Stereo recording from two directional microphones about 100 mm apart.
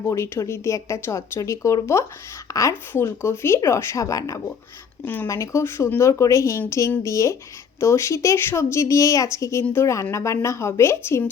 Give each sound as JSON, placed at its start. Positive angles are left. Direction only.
{"t": 0.1, "sound": "speech", "side_deg": 30}
{"t": 5.0, "sound": "speech", "side_deg": 20}
{"t": 5.3, "sound": "speech", "side_deg": 30}